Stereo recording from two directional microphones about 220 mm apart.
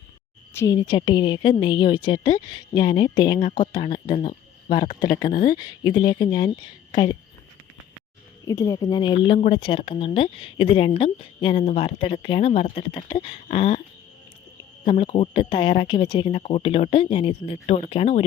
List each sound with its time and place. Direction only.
0.5 s a woman's voice: 15° left (ahead or behind)
8.4 s a woman's voice: 15° left (ahead or behind)
14.8 s a woman's voice: 25° left (ahead or behind)